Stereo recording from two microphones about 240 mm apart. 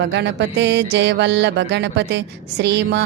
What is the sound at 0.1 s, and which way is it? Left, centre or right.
Music, right.